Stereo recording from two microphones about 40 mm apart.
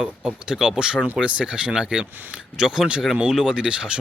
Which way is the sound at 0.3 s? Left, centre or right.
Centre.